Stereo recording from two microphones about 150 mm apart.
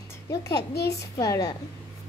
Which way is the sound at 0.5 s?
90° left.